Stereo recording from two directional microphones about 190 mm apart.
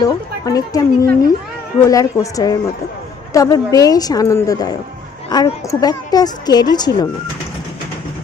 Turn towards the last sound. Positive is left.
turn(degrees=20)  # may be behind; listen again after turning